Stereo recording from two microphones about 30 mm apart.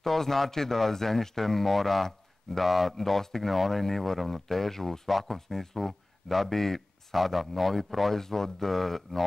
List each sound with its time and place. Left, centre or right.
0.0 s speech: centre
3.0 s speech: centre
7.2 s speech: centre
8.1 s speech: centre